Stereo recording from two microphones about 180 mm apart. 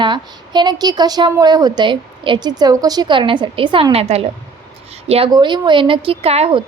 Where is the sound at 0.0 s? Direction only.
25° right (ahead or behind).